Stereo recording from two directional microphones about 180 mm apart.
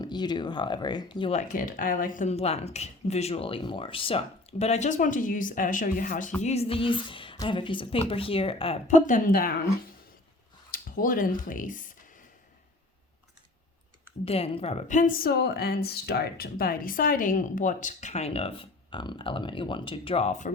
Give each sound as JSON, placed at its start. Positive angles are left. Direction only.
{"t": 0.0, "sound": "speech", "side_deg": 25}
{"t": 1.3, "sound": "speech", "side_deg": 40}
{"t": 6.4, "sound": "speech", "side_deg": 35}
{"t": 10.7, "sound": "speech", "side_deg": 50}
{"t": 14.3, "sound": "a woman's voice", "side_deg": 35}